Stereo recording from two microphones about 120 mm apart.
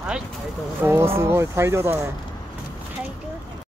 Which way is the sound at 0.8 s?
20° right (ahead or behind).